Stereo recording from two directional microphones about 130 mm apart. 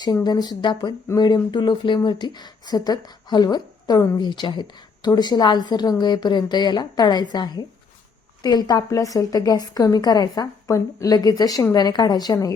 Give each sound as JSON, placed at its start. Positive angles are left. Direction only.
{"t": 0.0, "sound": "a woman's voice", "side_deg": 30}